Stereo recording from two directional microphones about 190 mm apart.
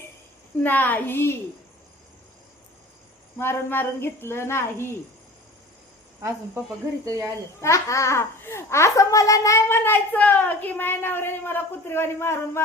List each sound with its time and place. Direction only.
0.6 s a child's voice: 10° left (ahead or behind)
3.3 s a child's voice: 10° left (ahead or behind)
7.0 s speech: 15° right (ahead or behind)
7.6 s a child's voice: 15° left (ahead or behind)